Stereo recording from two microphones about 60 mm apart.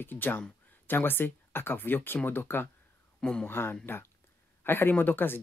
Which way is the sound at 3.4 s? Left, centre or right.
Left.